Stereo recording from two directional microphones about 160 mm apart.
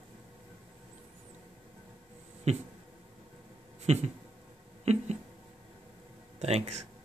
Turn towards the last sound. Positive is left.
turn(degrees=-40)  # may be behind; listen again after turning